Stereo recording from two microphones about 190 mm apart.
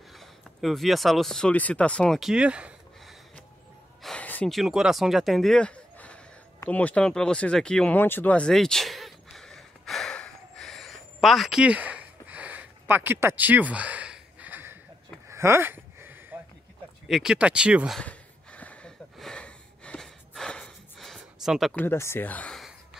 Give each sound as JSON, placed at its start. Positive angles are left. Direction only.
{"t": 0.1, "sound": "speech", "side_deg": 0}
{"t": 4.0, "sound": "a sound", "side_deg": 5}
{"t": 21.7, "sound": "speech", "side_deg": 10}